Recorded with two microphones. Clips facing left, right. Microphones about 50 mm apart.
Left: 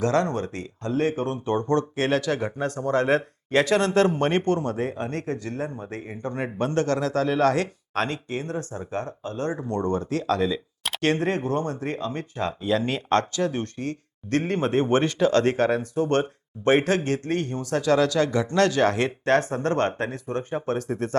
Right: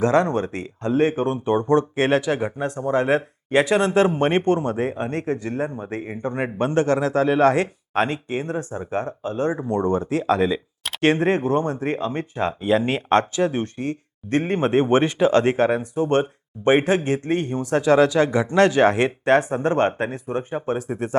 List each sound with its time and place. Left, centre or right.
0.0 s speech: right